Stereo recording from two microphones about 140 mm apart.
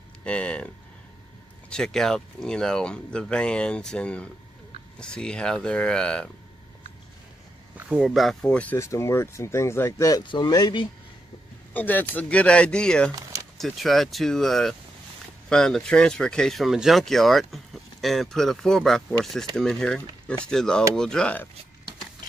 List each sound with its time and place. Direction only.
0.2 s speech: 10° left (ahead or behind)
1.7 s speech: 5° left (ahead or behind)
7.7 s speech: 10° right (ahead or behind); by 8.7 s 5° left (ahead or behind)
8.7 s speech: 20° left (ahead or behind)
11.7 s speech: 15° left (ahead or behind)